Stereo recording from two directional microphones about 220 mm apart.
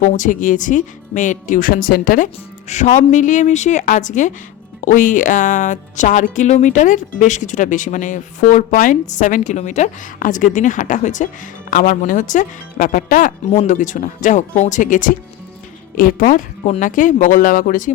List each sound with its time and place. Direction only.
0.0 s speech: 35° left (ahead or behind)